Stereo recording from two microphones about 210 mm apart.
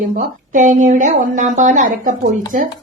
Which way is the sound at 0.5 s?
35° right (ahead or behind).